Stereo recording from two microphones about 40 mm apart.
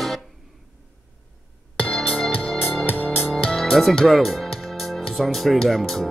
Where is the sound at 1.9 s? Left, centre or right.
Centre.